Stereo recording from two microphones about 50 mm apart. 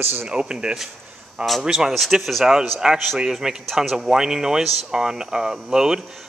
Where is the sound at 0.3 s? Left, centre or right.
Centre.